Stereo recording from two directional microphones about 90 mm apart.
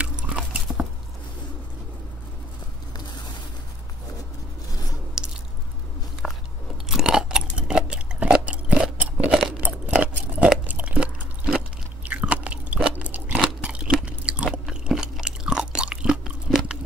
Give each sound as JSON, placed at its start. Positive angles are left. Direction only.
{"t": 0.0, "sound": "chewing", "side_deg": -15}
{"t": 5.2, "sound": "squish", "side_deg": -10}
{"t": 6.2, "sound": "biting", "side_deg": 5}
{"t": 6.9, "sound": "chewing", "side_deg": -5}